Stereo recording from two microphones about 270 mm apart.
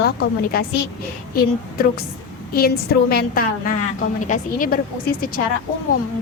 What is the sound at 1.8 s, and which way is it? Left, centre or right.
A woman's voice, left.